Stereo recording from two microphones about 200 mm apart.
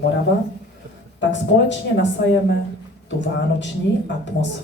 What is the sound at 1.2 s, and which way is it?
Speech, 60° left (ahead or behind).